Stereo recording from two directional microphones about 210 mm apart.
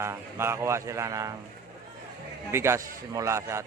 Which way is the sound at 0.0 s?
10° right (ahead or behind).